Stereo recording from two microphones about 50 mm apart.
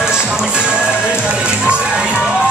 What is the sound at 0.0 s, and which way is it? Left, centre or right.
Music, centre.